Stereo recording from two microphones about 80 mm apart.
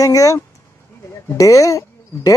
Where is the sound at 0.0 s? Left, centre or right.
Left.